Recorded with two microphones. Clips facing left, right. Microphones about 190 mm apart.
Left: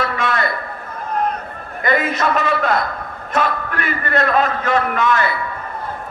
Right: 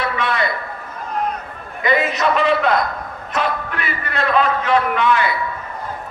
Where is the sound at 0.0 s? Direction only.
45° left (ahead or behind).